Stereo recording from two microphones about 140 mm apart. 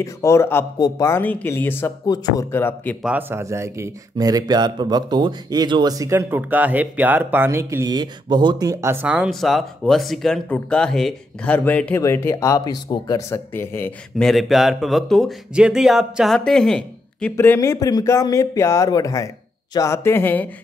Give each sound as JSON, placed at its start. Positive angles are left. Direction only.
{"t": 0.0, "sound": "speech", "side_deg": 20}
{"t": 2.0, "sound": "speech", "side_deg": 30}
{"t": 2.5, "sound": "speech", "side_deg": 15}
{"t": 3.0, "sound": "speech", "side_deg": -10}
{"t": 9.0, "sound": "speech", "side_deg": -5}
{"t": 14.1, "sound": "speech", "side_deg": 0}
{"t": 17.4, "sound": "speech", "side_deg": 20}